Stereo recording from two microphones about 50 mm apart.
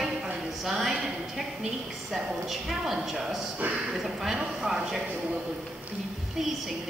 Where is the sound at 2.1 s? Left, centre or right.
Centre.